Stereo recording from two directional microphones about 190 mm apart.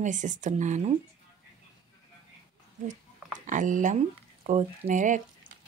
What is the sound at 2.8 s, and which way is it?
A woman's voice, 40° right (ahead or behind).